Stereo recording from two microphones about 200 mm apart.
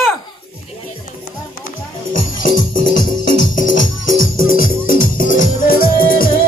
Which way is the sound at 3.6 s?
70° left (ahead or behind).